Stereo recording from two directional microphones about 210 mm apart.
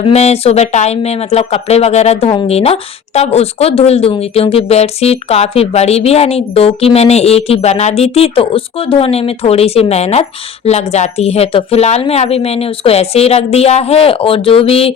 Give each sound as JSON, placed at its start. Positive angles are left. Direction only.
{"t": 0.0, "sound": "speech", "side_deg": 30}